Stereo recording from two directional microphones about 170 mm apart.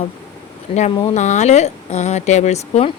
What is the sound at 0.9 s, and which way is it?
Speech, 30° left (ahead or behind).